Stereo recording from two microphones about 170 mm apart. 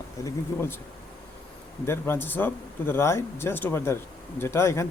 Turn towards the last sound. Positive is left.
turn(degrees=15)  # may be behind; listen again after turning